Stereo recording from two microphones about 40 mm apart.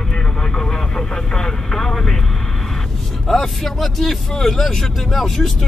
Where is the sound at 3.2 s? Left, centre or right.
Centre.